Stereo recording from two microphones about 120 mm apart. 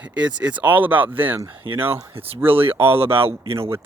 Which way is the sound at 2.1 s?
55° right (ahead or behind).